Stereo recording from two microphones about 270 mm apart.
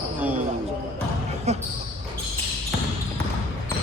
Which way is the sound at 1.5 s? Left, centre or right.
Right.